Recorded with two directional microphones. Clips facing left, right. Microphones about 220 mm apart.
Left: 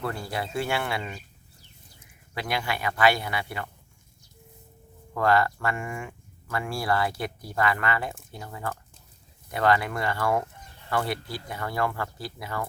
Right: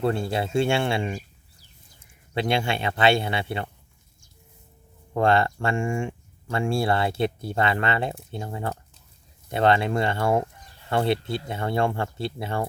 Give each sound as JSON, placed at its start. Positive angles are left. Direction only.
{"t": 0.0, "sound": "speech", "side_deg": -25}
{"t": 2.3, "sound": "speech", "side_deg": -25}
{"t": 5.1, "sound": "speech", "side_deg": -25}